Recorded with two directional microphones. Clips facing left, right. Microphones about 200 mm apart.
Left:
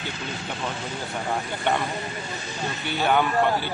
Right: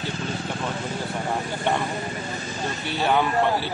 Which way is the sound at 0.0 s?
40° right (ahead or behind).